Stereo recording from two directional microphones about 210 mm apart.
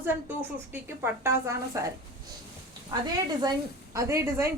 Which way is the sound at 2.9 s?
20° right (ahead or behind).